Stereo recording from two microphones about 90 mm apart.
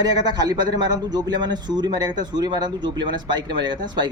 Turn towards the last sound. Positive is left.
turn(degrees=-55)  # may be behind; listen again after turning